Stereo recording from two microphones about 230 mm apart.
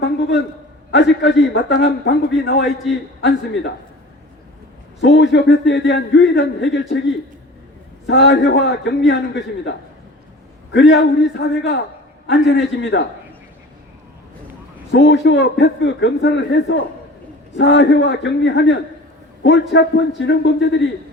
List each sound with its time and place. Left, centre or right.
0.0 s a man's voice: left
4.9 s a man's voice: left
8.0 s a man's voice: left
14.9 s a man's voice: left